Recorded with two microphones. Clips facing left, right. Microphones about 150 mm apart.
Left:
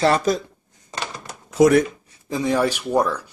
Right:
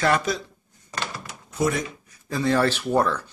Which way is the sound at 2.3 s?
15° left (ahead or behind).